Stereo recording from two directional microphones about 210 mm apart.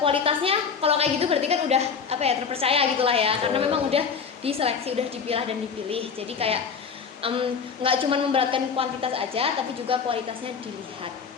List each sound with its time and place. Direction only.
0.0 s a woman's voice: 25° right (ahead or behind)